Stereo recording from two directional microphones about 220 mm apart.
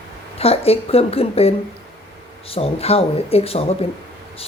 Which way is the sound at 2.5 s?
25° left (ahead or behind).